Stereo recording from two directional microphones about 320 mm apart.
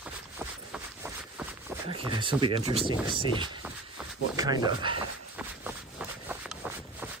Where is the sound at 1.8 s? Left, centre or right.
Centre.